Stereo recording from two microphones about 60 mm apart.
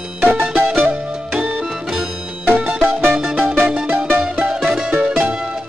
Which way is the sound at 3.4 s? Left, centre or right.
Right.